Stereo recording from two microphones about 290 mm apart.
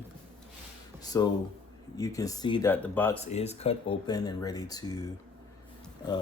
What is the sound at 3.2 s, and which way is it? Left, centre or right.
Speech, left.